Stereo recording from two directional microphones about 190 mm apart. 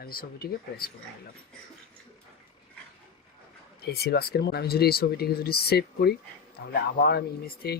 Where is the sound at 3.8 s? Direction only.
55° left (ahead or behind).